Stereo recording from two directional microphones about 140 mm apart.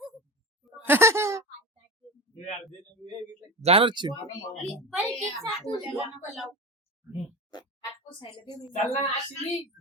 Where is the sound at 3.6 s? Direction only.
45° right (ahead or behind).